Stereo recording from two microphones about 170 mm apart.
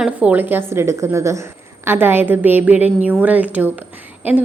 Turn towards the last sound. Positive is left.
turn(degrees=-10)  # may be behind; listen again after turning